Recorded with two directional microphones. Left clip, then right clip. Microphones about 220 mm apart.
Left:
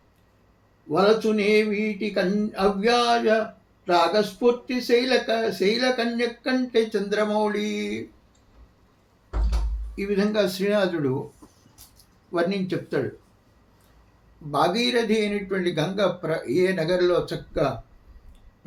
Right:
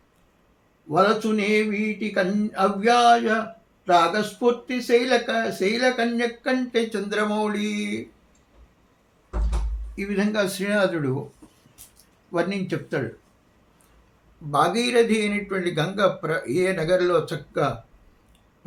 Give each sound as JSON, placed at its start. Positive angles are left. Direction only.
{"t": 0.9, "sound": "speech", "side_deg": -15}
{"t": 9.9, "sound": "speech", "side_deg": -15}
{"t": 12.3, "sound": "speech", "side_deg": -15}
{"t": 14.5, "sound": "speech", "side_deg": -15}